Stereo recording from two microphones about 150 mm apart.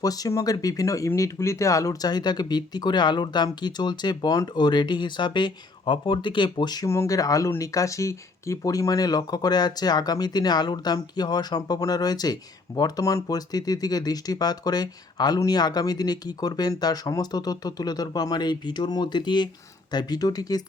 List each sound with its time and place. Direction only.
0.0 s speech: 25° left (ahead or behind)